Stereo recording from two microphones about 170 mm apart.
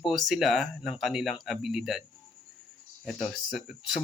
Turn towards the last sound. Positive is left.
turn(degrees=0)  # may be behind; listen again after turning